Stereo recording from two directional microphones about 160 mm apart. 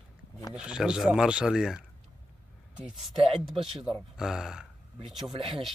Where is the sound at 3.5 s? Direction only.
35° right (ahead or behind).